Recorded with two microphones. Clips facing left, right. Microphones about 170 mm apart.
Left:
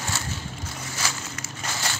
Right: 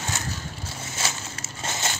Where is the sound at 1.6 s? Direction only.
25° right (ahead or behind).